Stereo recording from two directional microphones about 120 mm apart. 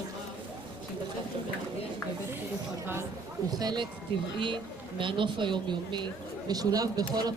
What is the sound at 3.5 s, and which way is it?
Speech, 35° right (ahead or behind).